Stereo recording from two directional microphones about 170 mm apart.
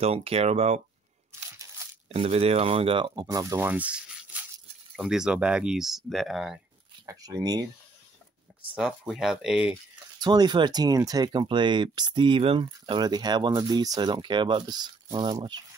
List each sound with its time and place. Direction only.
0.0 s speech: 35° right (ahead or behind)
2.1 s speech: 35° right (ahead or behind); by 6.6 s centre (ahead or behind)
7.1 s speech: 20° right (ahead or behind)
9.0 s speech: centre (ahead or behind)
10.2 s speech: 25° right (ahead or behind)